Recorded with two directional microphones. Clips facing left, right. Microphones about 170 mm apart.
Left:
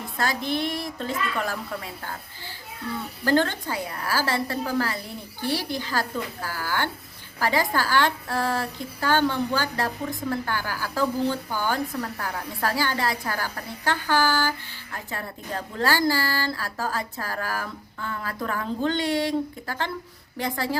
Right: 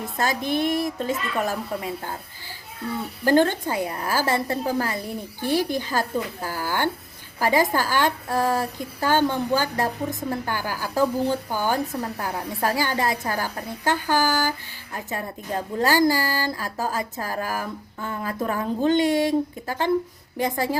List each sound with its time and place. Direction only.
0.4 s speech: 50° right (ahead or behind)
0.9 s speech: 15° right (ahead or behind)
3.2 s speech: 15° right (ahead or behind)
5.5 s speech: 50° right (ahead or behind)
5.9 s a woman's voice: 20° right (ahead or behind)
20.4 s speech: 15° right (ahead or behind)